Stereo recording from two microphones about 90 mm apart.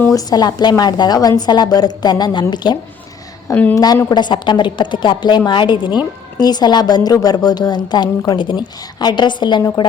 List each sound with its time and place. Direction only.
0.1 s a woman's voice: 45° left (ahead or behind)
3.5 s a woman's voice: 20° left (ahead or behind)
4.1 s a woman's voice: 55° left (ahead or behind)